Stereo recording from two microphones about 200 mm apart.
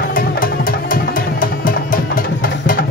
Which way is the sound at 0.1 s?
45° left (ahead or behind).